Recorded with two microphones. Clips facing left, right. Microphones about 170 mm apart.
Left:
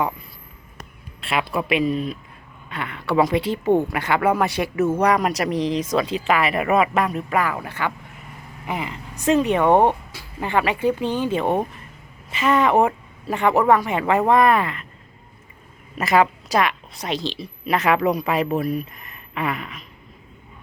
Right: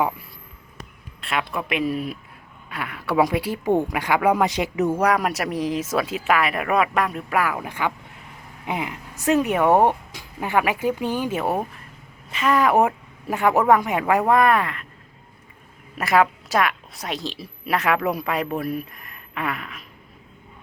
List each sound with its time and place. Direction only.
1.2 s a woman's voice: 5° left (ahead or behind)
16.0 s a woman's voice: centre (ahead or behind)